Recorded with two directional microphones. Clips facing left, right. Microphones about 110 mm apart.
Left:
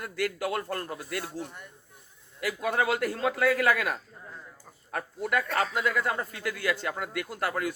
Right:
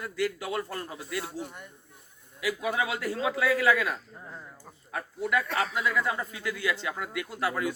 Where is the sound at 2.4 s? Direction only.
50° left (ahead or behind).